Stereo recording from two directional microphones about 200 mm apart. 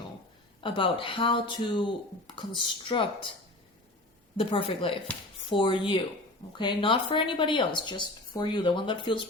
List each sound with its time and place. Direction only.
0.6 s speech: 25° left (ahead or behind)
4.4 s speech: 25° left (ahead or behind)